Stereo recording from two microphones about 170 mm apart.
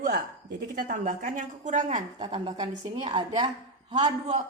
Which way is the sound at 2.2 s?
30° right (ahead or behind).